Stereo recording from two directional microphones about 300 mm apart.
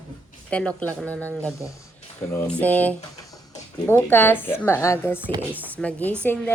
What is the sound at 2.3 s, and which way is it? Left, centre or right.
Speech, centre.